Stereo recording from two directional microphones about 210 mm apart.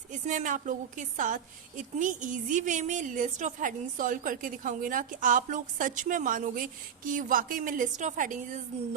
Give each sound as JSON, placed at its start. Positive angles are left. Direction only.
{"t": 0.1, "sound": "a woman's voice", "side_deg": -35}